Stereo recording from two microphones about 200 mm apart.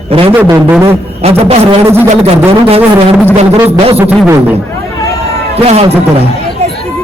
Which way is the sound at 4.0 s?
10° right (ahead or behind).